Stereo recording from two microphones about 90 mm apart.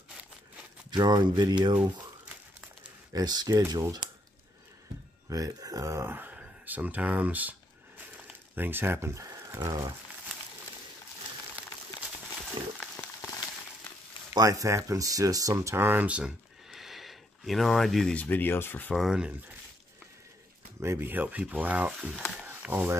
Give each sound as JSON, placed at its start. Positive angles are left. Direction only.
{"t": 0.8, "sound": "speech", "side_deg": -50}
{"t": 3.1, "sound": "speech", "side_deg": -45}
{"t": 5.3, "sound": "speech", "side_deg": -40}
{"t": 6.0, "sound": "speech", "side_deg": -20}
{"t": 12.6, "sound": "a sound", "side_deg": -65}
{"t": 14.3, "sound": "speech", "side_deg": -40}
{"t": 16.7, "sound": "a sound", "side_deg": 0}
{"t": 18.1, "sound": "speech", "side_deg": 20}
{"t": 18.9, "sound": "speech", "side_deg": -5}
{"t": 20.8, "sound": "speech", "side_deg": -25}
{"t": 22.5, "sound": "a sound", "side_deg": -15}